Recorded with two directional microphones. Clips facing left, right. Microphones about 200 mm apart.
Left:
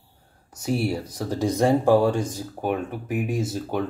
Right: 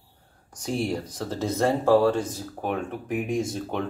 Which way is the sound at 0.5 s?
5° left (ahead or behind).